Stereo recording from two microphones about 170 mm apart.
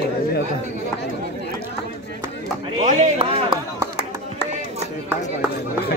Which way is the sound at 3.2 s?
25° right (ahead or behind).